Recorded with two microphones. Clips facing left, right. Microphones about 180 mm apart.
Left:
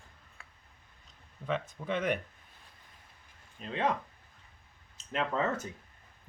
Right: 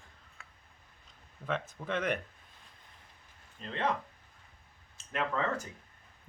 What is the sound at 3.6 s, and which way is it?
Speech, 10° left (ahead or behind).